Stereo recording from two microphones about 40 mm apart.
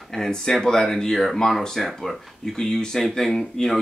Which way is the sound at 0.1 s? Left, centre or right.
Centre.